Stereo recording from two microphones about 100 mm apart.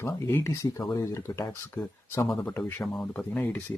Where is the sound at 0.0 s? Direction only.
25° left (ahead or behind).